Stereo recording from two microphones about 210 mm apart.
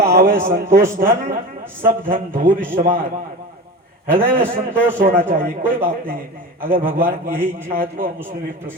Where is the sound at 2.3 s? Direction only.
40° right (ahead or behind).